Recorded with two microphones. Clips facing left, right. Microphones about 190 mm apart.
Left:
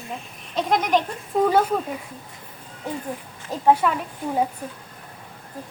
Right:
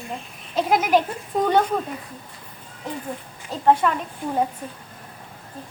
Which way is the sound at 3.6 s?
10° left (ahead or behind).